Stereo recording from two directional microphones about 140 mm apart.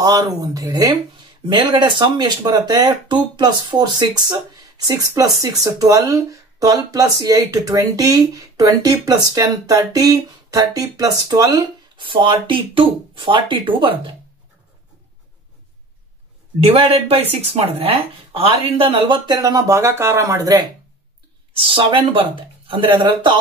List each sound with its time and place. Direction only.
0.0 s speech: 30° right (ahead or behind)
16.5 s a man's voice: 40° right (ahead or behind); by 20.6 s 25° right (ahead or behind)
21.5 s a woman's voice: 40° right (ahead or behind)